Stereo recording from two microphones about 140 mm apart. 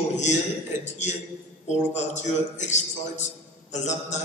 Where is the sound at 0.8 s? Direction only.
55° left (ahead or behind).